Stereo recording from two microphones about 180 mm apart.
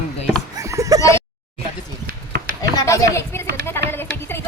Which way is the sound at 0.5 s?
15° right (ahead or behind).